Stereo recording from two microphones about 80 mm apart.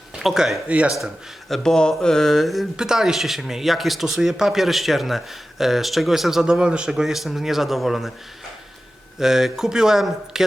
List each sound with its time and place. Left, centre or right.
0.2 s speech: centre
0.7 s speech: centre
0.9 s speech: centre
9.1 s speech: centre